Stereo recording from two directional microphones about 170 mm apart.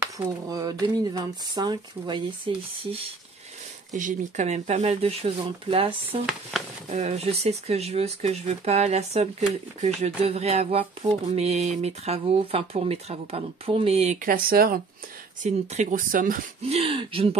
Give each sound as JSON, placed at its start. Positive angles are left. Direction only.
{"t": 0.0, "sound": "speech", "side_deg": -20}
{"t": 3.9, "sound": "speech", "side_deg": -45}
{"t": 6.5, "sound": "speech", "side_deg": 0}
{"t": 6.9, "sound": "speech", "side_deg": -40}
{"t": 14.2, "sound": "speech", "side_deg": -60}
{"t": 15.4, "sound": "speech", "side_deg": -45}
{"t": 16.6, "sound": "speech", "side_deg": -35}